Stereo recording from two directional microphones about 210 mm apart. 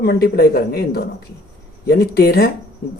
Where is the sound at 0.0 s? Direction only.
45° left (ahead or behind).